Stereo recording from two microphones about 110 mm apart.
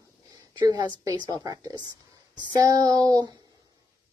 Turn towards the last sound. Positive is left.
turn(degrees=-35)  # may be behind; listen again after turning